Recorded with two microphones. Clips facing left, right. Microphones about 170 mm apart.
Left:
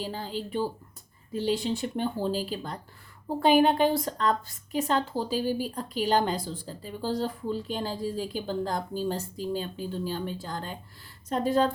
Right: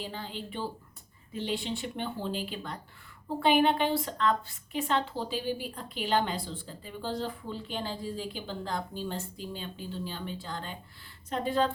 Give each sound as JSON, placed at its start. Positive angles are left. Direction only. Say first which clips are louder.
{"t": 0.0, "sound": "a woman's voice", "louder": "left 5 dB", "side_deg": 40}